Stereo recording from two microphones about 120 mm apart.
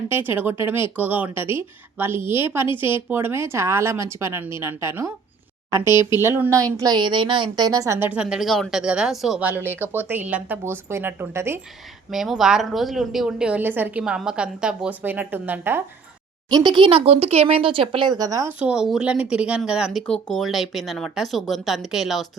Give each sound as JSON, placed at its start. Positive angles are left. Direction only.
{"t": 0.1, "sound": "a woman's voice", "side_deg": -15}
{"t": 5.8, "sound": "speech", "side_deg": 40}
{"t": 6.1, "sound": "speech", "side_deg": -20}
{"t": 7.9, "sound": "a woman's voice", "side_deg": -20}
{"t": 8.2, "sound": "a woman's voice", "side_deg": -5}
{"t": 9.6, "sound": "a woman's voice", "side_deg": -20}
{"t": 12.1, "sound": "a woman's voice", "side_deg": 0}
{"t": 16.5, "sound": "speech", "side_deg": -35}
{"t": 18.6, "sound": "speech", "side_deg": -5}